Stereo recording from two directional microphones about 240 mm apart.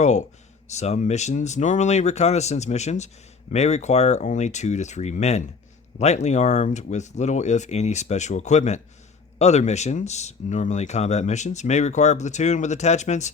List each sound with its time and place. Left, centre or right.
0.0 s speech: left